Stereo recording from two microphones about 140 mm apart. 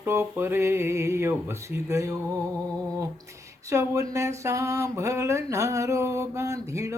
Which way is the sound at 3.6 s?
20° right (ahead or behind).